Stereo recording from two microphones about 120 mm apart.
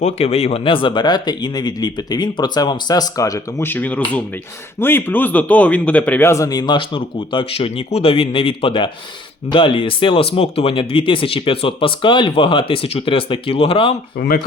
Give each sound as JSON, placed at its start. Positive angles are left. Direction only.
{"t": 0.0, "sound": "a man's voice", "side_deg": 60}
{"t": 3.7, "sound": "a man's voice", "side_deg": 15}